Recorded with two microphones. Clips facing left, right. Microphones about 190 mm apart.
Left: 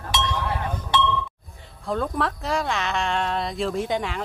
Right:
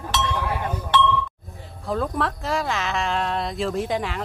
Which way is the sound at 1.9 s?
Centre (ahead or behind).